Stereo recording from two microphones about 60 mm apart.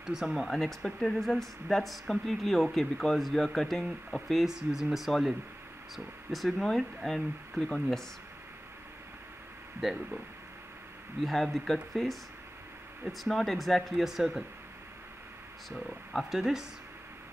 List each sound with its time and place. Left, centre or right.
0.0 s speech: centre
0.5 s speech: centre
7.6 s speech: centre
9.8 s speech: centre
11.2 s speech: centre
13.3 s speech: centre
15.7 s speech: centre
16.3 s speech: centre